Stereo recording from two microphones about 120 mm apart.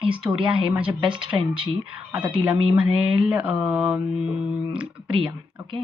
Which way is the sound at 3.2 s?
10° right (ahead or behind).